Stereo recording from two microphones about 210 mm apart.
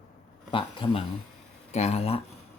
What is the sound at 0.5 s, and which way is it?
Speech, 25° left (ahead or behind).